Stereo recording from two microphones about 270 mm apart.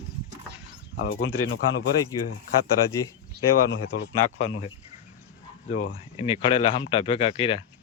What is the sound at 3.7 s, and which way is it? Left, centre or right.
Speech, left.